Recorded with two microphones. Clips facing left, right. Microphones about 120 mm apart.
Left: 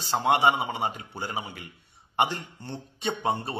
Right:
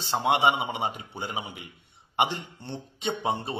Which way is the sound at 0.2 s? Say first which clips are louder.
Left 1 dB; 20° right (ahead or behind).